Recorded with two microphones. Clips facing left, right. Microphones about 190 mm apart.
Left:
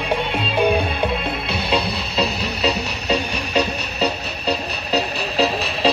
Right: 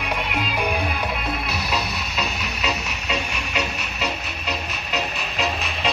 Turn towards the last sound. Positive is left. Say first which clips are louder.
# left 6 dB
turn(degrees=35)  # may be behind; listen again after turning